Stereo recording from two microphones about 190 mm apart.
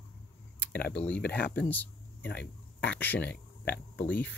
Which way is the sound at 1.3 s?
60° left (ahead or behind).